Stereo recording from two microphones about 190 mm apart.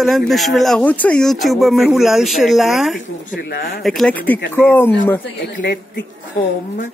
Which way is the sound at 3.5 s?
50° left (ahead or behind).